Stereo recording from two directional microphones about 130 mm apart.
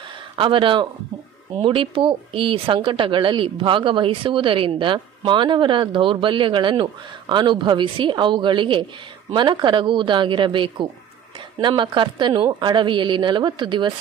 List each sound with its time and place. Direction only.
0.4 s speech: 40° right (ahead or behind)